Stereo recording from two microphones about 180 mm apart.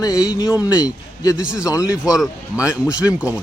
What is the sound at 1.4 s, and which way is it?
Speech, 5° right (ahead or behind).